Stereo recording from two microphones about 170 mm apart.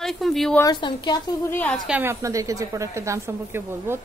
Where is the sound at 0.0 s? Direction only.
Centre (ahead or behind).